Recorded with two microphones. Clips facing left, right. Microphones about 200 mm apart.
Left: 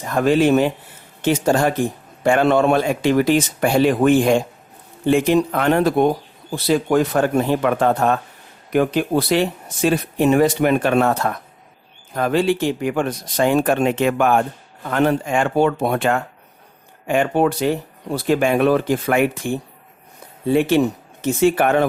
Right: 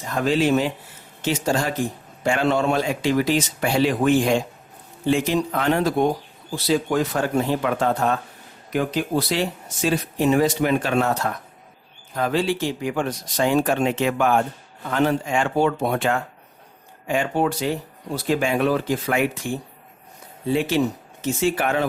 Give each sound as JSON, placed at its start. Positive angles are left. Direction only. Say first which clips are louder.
{"t": 0.1, "sound": "speech", "louder": "left 4 dB", "side_deg": 55}
{"t": 20.5, "sound": "speech", "louder": "left 5 dB", "side_deg": 55}